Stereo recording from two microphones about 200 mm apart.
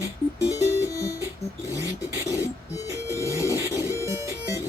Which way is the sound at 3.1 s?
15° left (ahead or behind).